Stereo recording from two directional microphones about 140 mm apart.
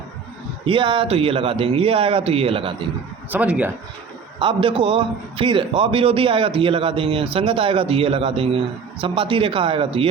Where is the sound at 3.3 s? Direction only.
10° right (ahead or behind).